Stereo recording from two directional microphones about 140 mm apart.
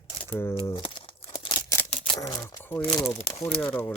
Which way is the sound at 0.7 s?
35° left (ahead or behind).